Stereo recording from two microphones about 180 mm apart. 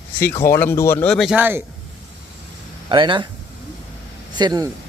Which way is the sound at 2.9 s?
25° right (ahead or behind).